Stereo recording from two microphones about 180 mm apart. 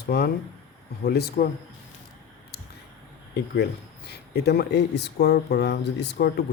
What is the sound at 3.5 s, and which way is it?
Speech, 65° left (ahead or behind).